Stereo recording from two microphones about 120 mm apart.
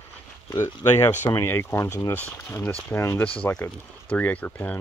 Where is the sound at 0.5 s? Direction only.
20° left (ahead or behind).